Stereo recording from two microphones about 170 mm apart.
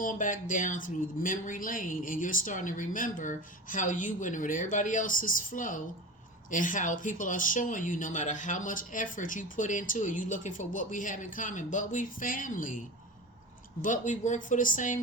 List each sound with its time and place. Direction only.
0.0 s speech: 50° left (ahead or behind)
13.8 s speech: 50° left (ahead or behind)